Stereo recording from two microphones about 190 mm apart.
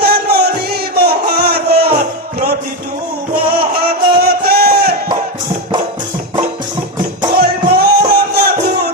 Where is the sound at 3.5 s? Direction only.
55° right (ahead or behind).